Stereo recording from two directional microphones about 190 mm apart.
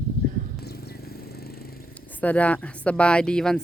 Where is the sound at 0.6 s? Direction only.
55° left (ahead or behind).